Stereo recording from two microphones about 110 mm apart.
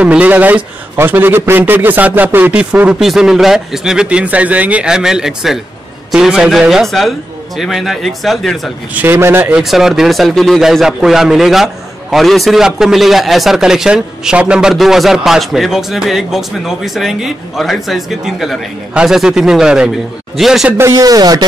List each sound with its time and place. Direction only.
0.0 s a man's voice: 10° right (ahead or behind)
8.9 s a man's voice: 20° right (ahead or behind)
9.6 s a man's voice: 5° right (ahead or behind)
20.7 s speech: 25° right (ahead or behind)